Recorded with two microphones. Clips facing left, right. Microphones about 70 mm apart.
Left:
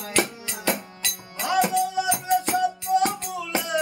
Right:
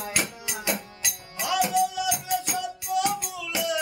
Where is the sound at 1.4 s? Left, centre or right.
Left.